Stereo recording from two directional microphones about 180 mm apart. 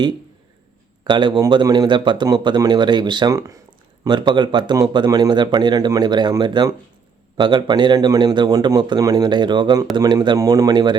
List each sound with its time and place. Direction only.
1.0 s speech: 25° right (ahead or behind)